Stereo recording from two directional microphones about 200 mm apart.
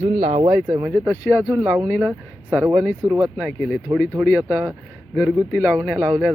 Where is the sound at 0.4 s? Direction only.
10° right (ahead or behind).